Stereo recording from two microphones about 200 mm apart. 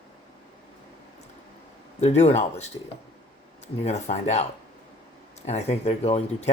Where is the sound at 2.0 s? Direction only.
35° left (ahead or behind).